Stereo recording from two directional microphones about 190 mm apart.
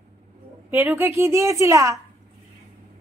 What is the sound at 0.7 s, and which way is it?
Speech, 10° right (ahead or behind).